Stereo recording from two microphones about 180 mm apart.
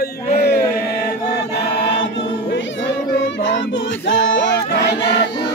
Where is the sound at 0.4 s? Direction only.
60° left (ahead or behind).